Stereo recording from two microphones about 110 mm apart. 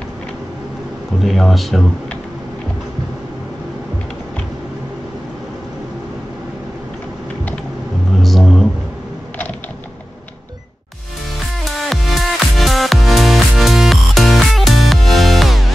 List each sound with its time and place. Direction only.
1.2 s speech: centre (ahead or behind)
8.2 s a sound: centre (ahead or behind)
11.6 s music: centre (ahead or behind)